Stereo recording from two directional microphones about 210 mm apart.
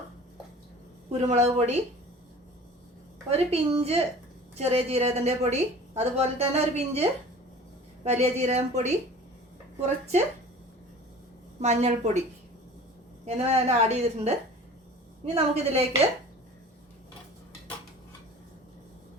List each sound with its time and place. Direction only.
1.1 s a woman's voice: 30° right (ahead or behind)
3.2 s a woman's voice: 30° right (ahead or behind)
11.6 s a woman's voice: 30° right (ahead or behind)
13.2 s a woman's voice: 30° right (ahead or behind)